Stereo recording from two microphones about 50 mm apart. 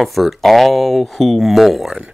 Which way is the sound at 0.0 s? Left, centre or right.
Centre.